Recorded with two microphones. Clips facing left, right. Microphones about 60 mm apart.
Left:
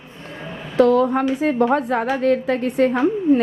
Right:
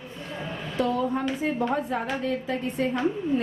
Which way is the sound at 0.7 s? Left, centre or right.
Left.